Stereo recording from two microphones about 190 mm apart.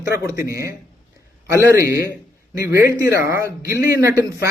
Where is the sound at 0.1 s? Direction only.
15° right (ahead or behind).